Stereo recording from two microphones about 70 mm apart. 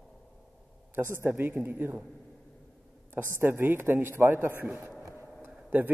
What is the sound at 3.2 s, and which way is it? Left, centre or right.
A man's voice, right.